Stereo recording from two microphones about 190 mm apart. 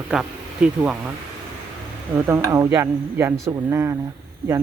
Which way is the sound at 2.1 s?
10° right (ahead or behind).